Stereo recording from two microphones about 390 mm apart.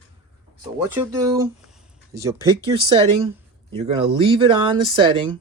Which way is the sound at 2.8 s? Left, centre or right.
Centre.